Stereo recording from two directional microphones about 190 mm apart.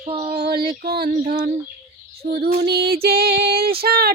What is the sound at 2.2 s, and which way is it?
Female singing, 55° right (ahead or behind).